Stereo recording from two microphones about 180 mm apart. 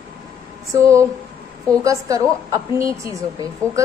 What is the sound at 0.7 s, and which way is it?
A woman's voice, 15° right (ahead or behind).